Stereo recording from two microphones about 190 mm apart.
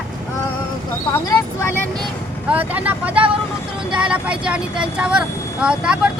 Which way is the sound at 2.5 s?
10° right (ahead or behind).